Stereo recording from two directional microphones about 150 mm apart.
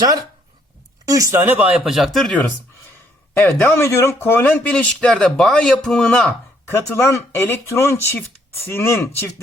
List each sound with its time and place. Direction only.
1.0 s speech: 20° right (ahead or behind); by 2.4 s centre (ahead or behind)
3.3 s speech: 15° left (ahead or behind)